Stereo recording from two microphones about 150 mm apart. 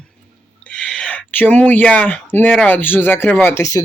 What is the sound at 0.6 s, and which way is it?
Speech, 5° left (ahead or behind).